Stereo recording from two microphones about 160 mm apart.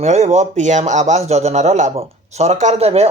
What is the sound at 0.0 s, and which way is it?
Speech, 45° right (ahead or behind).